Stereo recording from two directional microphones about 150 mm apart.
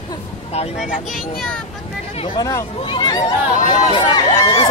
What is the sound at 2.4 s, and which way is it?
Speech, 25° left (ahead or behind).